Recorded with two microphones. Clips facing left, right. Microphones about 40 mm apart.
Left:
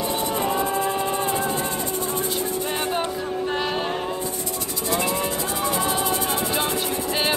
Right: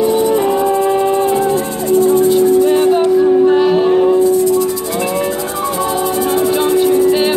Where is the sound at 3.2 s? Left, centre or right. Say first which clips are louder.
Right 17 dB; centre.